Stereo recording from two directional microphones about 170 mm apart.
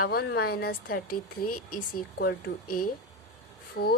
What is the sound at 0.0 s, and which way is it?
A woman's voice, 65° left (ahead or behind).